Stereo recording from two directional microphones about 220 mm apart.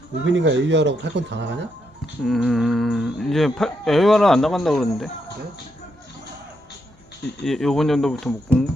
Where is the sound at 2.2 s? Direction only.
Centre (ahead or behind).